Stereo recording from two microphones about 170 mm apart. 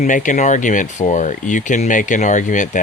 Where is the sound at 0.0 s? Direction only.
50° left (ahead or behind).